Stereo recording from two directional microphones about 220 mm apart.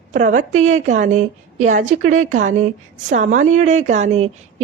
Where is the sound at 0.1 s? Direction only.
35° right (ahead or behind).